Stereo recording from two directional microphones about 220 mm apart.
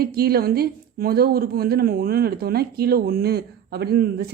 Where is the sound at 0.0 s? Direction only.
45° right (ahead or behind).